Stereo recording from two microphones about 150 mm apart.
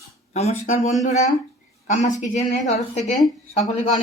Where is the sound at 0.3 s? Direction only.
45° left (ahead or behind).